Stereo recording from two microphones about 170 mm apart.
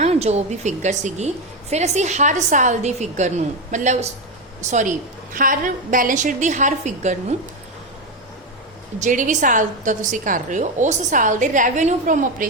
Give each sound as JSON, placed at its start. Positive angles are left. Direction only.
{"t": 0.0, "sound": "a woman's voice", "side_deg": -40}
{"t": 9.0, "sound": "a woman's voice", "side_deg": -50}